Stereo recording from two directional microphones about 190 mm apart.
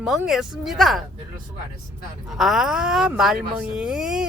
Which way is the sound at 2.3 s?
Centre (ahead or behind).